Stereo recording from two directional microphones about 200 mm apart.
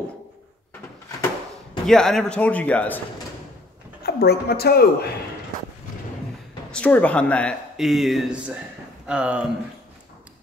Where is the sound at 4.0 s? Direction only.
50° left (ahead or behind).